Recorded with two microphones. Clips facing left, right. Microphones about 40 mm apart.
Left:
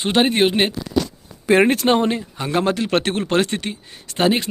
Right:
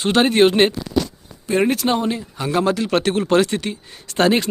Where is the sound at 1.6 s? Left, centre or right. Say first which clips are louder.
Even; left.